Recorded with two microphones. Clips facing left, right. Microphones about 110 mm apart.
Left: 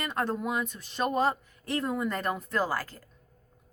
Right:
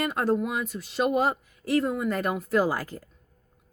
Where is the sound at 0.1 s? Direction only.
5° right (ahead or behind).